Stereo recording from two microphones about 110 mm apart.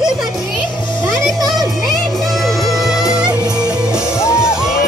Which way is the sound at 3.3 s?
35° right (ahead or behind).